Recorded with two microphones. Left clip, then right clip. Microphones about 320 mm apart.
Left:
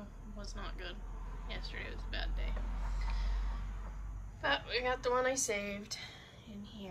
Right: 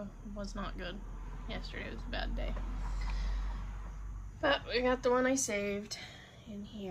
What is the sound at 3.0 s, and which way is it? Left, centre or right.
Music, centre.